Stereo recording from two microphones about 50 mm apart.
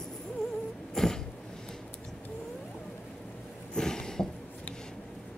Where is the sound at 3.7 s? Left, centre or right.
Centre.